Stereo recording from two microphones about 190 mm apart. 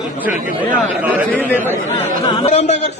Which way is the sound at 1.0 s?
10° right (ahead or behind).